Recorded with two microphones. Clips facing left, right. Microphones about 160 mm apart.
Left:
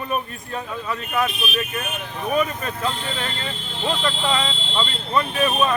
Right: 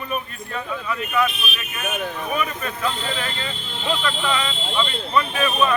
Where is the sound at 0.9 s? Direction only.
35° left (ahead or behind).